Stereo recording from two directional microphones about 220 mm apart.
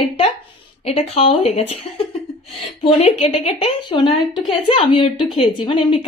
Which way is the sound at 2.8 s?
30° left (ahead or behind).